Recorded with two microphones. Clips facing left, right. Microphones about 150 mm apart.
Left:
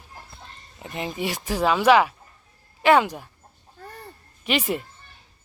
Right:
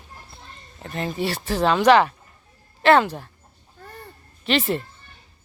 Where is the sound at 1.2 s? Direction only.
15° left (ahead or behind).